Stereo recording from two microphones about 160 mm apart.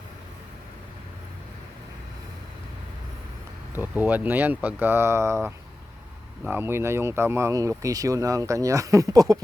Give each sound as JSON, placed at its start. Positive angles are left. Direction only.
{"t": 3.8, "sound": "speech", "side_deg": -10}